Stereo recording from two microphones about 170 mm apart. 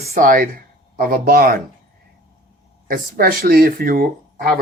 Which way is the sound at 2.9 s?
60° right (ahead or behind).